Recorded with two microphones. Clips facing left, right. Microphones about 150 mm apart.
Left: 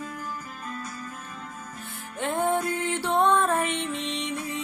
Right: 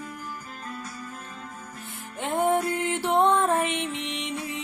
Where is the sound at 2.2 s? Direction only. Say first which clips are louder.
Right 2 dB; 20° right (ahead or behind).